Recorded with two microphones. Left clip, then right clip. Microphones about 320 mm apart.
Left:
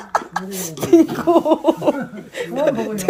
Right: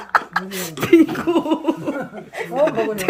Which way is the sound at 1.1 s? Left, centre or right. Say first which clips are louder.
Left 4 dB; centre.